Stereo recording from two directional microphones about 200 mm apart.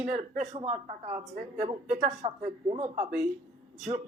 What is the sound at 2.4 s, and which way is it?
Speech, 25° right (ahead or behind).